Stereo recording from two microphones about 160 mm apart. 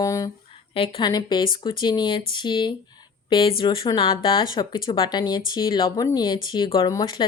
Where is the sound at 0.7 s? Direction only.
35° left (ahead or behind).